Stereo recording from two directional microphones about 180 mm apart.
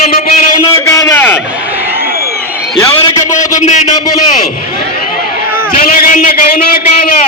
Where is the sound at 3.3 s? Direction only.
45° left (ahead or behind).